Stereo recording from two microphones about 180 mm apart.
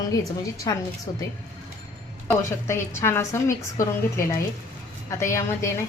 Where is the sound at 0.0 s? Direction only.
20° left (ahead or behind).